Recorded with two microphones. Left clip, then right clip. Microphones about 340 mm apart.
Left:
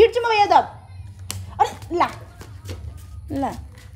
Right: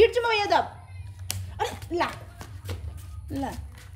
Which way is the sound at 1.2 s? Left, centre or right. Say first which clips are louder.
Left 10 dB; centre.